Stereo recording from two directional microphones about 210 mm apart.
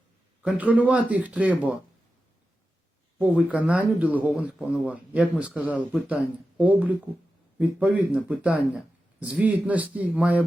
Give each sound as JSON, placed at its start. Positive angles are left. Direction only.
{"t": 0.4, "sound": "speech", "side_deg": -5}
{"t": 3.2, "sound": "speech", "side_deg": -5}